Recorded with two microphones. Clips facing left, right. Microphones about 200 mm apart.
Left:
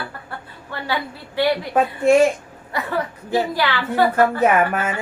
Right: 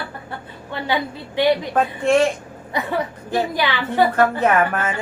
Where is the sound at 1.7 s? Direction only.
5° left (ahead or behind).